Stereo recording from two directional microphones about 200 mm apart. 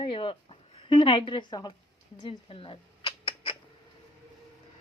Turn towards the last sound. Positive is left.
turn(degrees=25)  # may be behind; listen again after turning